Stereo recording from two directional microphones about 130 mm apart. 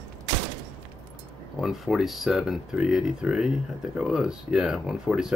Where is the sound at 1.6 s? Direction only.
Centre (ahead or behind).